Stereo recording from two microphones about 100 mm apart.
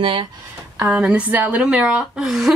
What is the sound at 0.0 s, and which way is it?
Speech, 60° right (ahead or behind).